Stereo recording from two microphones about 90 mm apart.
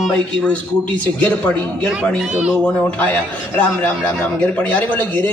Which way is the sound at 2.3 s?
10° right (ahead or behind).